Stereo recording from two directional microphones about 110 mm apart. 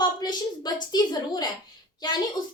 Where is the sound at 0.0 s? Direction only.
40° left (ahead or behind).